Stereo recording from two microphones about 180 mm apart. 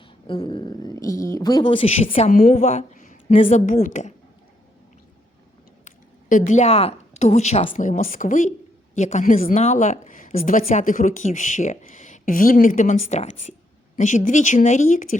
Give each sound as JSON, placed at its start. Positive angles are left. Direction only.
{"t": 0.3, "sound": "a sound", "side_deg": 30}
{"t": 1.0, "sound": "a woman's voice", "side_deg": 15}
{"t": 5.8, "sound": "a woman's voice", "side_deg": 45}
{"t": 7.8, "sound": "speech", "side_deg": 45}
{"t": 9.6, "sound": "speech", "side_deg": 40}